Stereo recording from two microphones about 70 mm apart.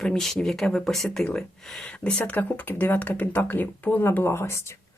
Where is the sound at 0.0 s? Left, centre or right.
Centre.